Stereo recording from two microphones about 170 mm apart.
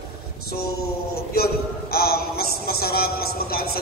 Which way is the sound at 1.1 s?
65° left (ahead or behind).